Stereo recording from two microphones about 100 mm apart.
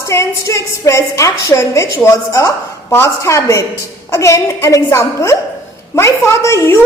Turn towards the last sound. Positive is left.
turn(degrees=30)  # may be behind; listen again after turning